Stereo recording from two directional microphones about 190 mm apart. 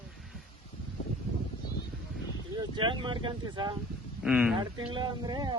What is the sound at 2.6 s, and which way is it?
Speech, 25° right (ahead or behind).